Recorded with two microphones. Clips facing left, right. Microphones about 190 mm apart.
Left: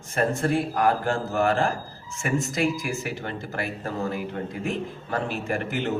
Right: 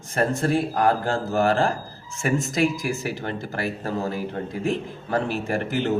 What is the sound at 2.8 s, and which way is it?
Speech, 35° right (ahead or behind).